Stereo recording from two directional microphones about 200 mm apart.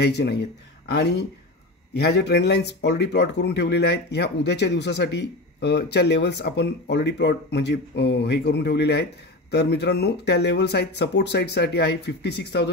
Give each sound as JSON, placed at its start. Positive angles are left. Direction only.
{"t": 0.0, "sound": "speech", "side_deg": 55}